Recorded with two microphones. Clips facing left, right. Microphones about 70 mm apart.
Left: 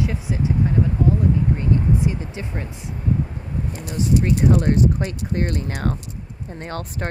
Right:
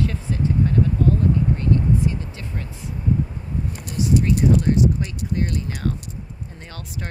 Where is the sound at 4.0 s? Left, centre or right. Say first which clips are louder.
Even; left.